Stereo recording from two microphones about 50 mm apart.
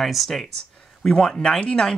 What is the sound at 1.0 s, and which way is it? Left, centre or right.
Speech, centre.